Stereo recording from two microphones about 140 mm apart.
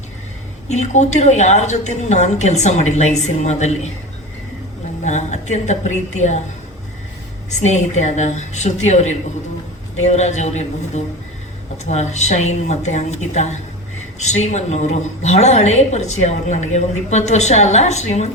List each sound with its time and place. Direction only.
0.7 s a woman's voice: 55° left (ahead or behind)
5.0 s a woman's voice: 55° left (ahead or behind)
7.6 s a woman's voice: 55° left (ahead or behind)